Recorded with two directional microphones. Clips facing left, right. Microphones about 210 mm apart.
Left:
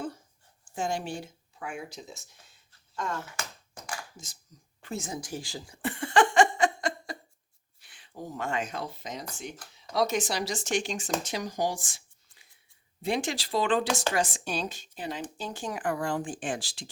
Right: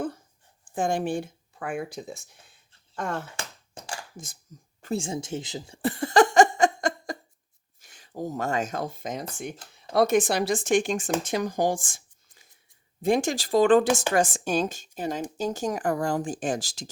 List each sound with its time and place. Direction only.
0.7 s speech: 55° right (ahead or behind)
4.8 s a woman's voice: 35° right (ahead or behind)
5.8 s a sound: 40° right (ahead or behind)
7.8 s speech: 45° right (ahead or behind)